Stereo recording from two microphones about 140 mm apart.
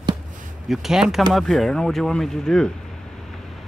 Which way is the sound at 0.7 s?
5° right (ahead or behind).